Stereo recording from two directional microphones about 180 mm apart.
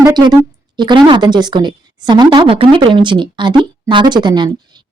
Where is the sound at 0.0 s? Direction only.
25° right (ahead or behind).